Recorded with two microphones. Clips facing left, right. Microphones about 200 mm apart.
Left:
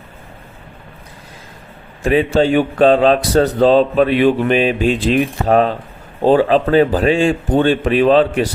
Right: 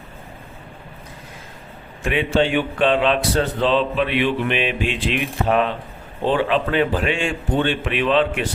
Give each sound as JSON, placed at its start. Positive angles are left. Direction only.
{"t": 2.0, "sound": "a man's voice", "side_deg": 40}